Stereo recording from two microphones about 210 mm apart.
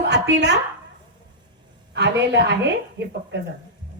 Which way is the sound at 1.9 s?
55° right (ahead or behind).